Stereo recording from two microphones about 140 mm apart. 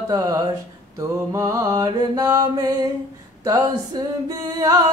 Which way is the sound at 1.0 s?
20° right (ahead or behind).